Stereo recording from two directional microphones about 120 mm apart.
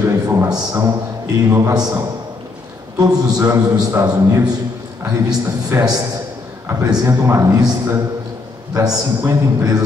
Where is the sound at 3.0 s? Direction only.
30° right (ahead or behind).